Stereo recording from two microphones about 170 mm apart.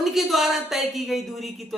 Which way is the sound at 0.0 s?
Centre (ahead or behind).